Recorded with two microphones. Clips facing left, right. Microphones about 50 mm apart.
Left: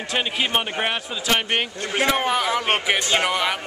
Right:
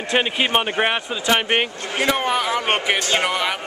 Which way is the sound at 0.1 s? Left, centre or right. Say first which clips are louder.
Right 4 dB; centre.